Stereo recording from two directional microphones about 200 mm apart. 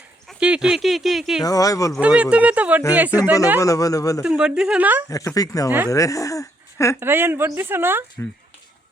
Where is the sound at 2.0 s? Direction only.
5° right (ahead or behind).